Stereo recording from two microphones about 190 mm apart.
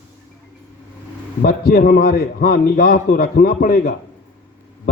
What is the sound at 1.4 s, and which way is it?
A man's voice, 55° left (ahead or behind).